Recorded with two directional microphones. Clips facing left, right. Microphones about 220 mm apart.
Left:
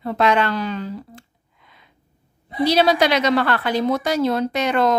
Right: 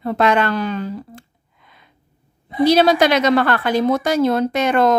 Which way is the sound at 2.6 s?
50° right (ahead or behind).